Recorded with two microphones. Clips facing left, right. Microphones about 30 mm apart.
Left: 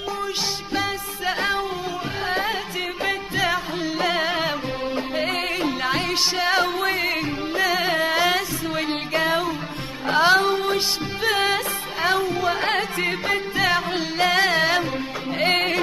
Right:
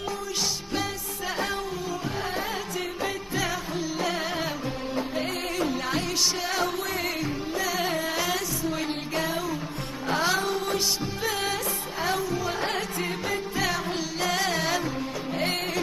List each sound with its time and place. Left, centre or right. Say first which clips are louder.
1.2 s music: left 6 dB; left
3.0 s music: left 7 dB; left